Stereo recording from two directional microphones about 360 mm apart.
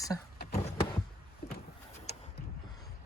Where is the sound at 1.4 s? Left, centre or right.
Left.